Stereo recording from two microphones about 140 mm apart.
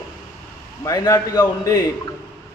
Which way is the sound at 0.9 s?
25° left (ahead or behind).